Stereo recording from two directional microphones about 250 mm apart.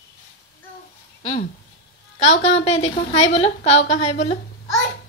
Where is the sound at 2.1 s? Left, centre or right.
Left.